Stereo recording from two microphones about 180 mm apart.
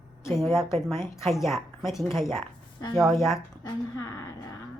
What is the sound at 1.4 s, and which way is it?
Speech, centre (ahead or behind).